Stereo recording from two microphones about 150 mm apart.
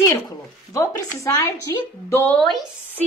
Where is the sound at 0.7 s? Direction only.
20° left (ahead or behind).